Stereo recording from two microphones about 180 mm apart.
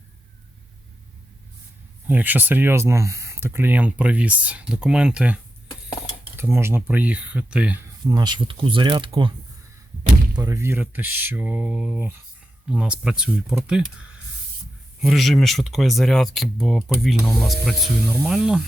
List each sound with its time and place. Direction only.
2.0 s speech: 10° right (ahead or behind)
8.0 s speech: 20° right (ahead or behind)
10.3 s speech: 20° right (ahead or behind)
15.0 s speech: centre (ahead or behind)